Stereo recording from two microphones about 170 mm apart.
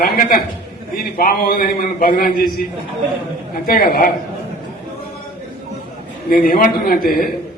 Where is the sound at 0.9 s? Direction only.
60° left (ahead or behind).